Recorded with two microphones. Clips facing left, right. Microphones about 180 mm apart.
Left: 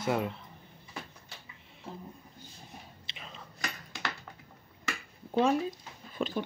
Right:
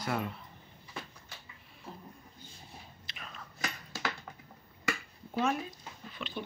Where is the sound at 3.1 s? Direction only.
25° left (ahead or behind).